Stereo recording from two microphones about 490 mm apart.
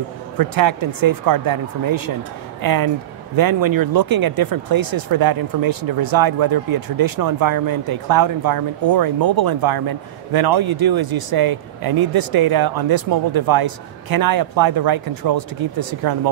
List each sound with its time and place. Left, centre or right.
0.4 s speech: right